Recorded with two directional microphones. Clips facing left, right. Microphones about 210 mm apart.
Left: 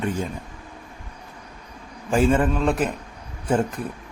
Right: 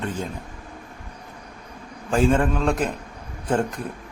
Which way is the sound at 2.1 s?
5° left (ahead or behind).